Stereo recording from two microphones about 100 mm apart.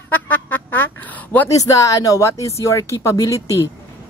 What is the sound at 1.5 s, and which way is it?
Speech, 35° left (ahead or behind).